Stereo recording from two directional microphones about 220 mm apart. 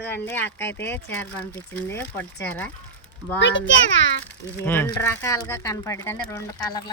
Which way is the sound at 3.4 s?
55° left (ahead or behind).